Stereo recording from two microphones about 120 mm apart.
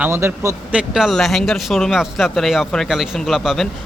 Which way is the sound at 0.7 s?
5° right (ahead or behind).